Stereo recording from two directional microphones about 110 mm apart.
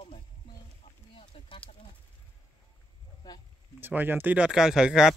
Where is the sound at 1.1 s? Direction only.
50° left (ahead or behind).